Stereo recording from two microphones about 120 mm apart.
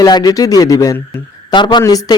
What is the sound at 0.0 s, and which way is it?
Speech, 35° left (ahead or behind).